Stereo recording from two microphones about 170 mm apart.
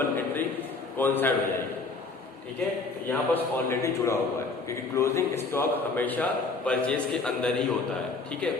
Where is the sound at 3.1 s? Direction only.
15° left (ahead or behind).